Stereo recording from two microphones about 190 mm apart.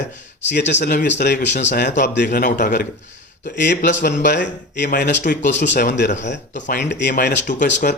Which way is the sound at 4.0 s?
40° left (ahead or behind).